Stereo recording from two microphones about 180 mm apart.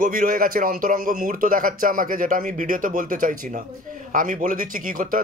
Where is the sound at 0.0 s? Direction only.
50° right (ahead or behind).